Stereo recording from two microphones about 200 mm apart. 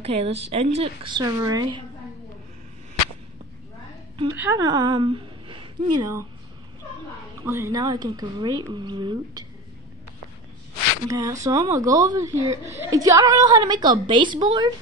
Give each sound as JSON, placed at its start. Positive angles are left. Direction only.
{"t": 0.0, "sound": "speech", "side_deg": -30}
{"t": 4.4, "sound": "a woman's voice", "side_deg": -15}
{"t": 7.4, "sound": "speech", "side_deg": -15}
{"t": 11.1, "sound": "speech", "side_deg": -15}